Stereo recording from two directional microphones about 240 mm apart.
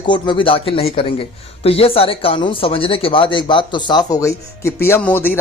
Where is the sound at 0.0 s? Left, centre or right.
Centre.